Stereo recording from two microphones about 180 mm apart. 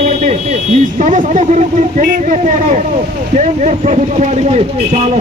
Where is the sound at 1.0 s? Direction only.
45° right (ahead or behind).